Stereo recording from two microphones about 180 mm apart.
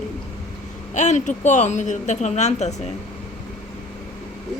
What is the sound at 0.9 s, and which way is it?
A woman's voice, 40° left (ahead or behind).